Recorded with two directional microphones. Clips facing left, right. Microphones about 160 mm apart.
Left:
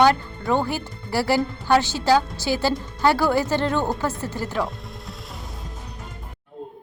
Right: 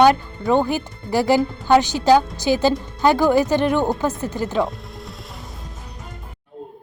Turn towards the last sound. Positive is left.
turn(degrees=0)  # may be behind; listen again after turning